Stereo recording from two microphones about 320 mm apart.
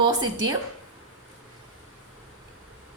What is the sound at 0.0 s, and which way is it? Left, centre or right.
Speech, centre.